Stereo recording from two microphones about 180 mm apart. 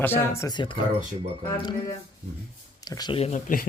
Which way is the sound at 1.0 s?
45° right (ahead or behind).